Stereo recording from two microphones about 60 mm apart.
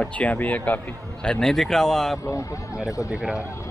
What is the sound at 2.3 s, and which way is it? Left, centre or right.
Speech, left.